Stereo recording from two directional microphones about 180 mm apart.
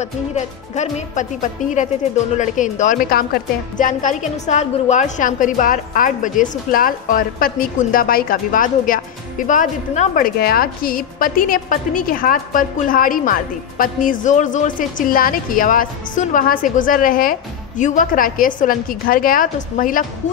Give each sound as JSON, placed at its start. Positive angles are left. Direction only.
{"t": 0.0, "sound": "a woman's voice", "side_deg": 40}